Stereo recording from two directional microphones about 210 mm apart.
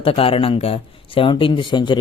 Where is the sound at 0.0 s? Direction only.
25° left (ahead or behind).